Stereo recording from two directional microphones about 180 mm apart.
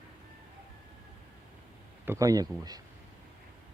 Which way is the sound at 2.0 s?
15° right (ahead or behind).